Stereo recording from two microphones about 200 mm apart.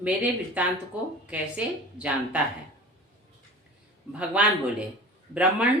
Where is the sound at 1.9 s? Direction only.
5° right (ahead or behind).